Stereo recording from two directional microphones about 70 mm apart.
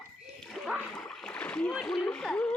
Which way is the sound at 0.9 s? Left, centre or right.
Centre.